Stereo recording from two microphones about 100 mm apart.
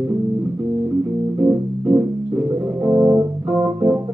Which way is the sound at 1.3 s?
25° right (ahead or behind).